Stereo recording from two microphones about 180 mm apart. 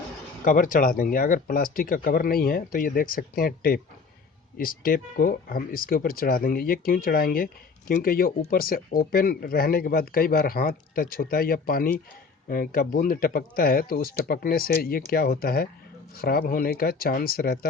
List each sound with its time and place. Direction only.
0.4 s speech: 50° left (ahead or behind)